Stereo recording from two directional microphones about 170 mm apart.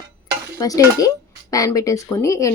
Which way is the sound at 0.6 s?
20° left (ahead or behind).